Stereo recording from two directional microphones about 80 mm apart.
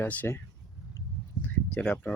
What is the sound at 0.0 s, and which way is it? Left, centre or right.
Speech, left.